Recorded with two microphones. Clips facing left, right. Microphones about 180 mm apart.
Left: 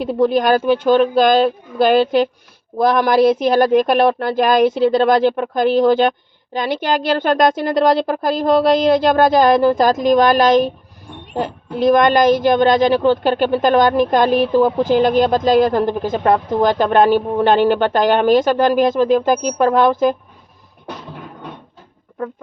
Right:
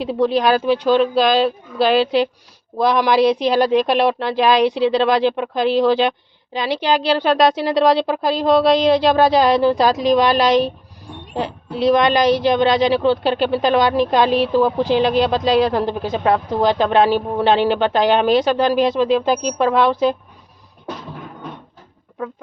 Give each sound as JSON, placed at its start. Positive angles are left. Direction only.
{"t": 0.0, "sound": "a woman's voice", "side_deg": 50}